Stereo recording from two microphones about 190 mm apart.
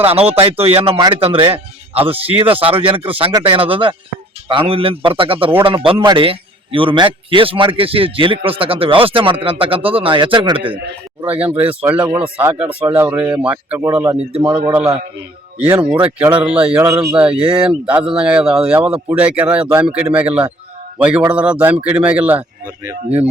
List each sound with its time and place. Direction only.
0.0 s a man's voice: 30° right (ahead or behind)
11.3 s a man's voice: 10° right (ahead or behind)
14.7 s speech: 10° right (ahead or behind)